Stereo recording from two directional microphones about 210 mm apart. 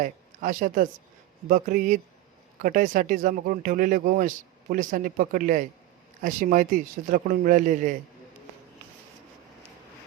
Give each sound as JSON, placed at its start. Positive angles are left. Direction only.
{"t": 0.0, "sound": "a woman's voice", "side_deg": -40}